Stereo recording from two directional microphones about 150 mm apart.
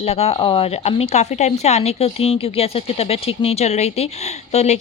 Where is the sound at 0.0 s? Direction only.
45° left (ahead or behind).